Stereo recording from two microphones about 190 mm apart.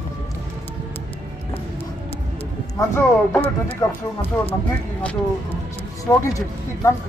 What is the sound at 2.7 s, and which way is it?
Speech, 15° left (ahead or behind).